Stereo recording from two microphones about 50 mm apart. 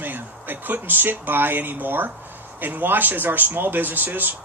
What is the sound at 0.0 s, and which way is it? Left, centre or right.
Speech, right.